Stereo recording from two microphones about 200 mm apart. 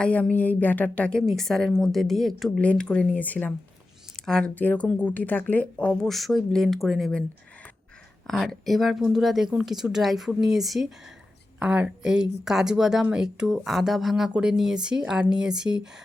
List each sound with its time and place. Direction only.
0.0 s speech: 5° left (ahead or behind)